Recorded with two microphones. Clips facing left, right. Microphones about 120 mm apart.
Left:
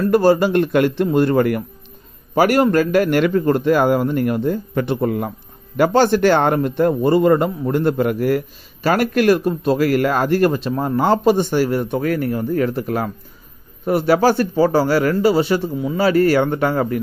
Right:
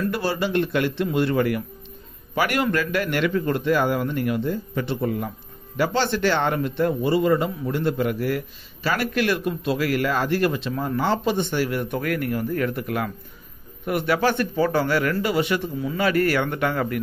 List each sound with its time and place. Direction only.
0.0 s a man's voice: 45° left (ahead or behind)